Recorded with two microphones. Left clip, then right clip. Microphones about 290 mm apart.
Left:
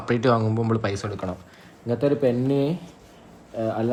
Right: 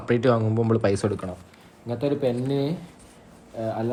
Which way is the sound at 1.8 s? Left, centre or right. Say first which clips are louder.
Left 3 dB; centre.